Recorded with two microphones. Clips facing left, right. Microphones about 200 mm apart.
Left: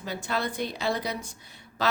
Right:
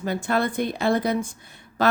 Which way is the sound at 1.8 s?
50° right (ahead or behind).